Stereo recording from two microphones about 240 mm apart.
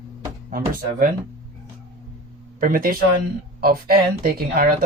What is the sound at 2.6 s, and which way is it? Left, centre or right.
Speech, right.